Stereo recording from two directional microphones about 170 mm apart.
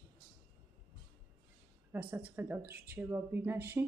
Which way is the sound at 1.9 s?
10° right (ahead or behind).